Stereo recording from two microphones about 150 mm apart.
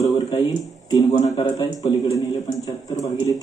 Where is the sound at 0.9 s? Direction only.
25° left (ahead or behind).